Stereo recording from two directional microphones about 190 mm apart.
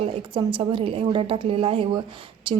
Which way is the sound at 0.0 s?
25° right (ahead or behind).